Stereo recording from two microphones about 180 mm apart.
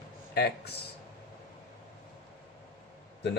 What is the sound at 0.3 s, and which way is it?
Speech, 65° left (ahead or behind).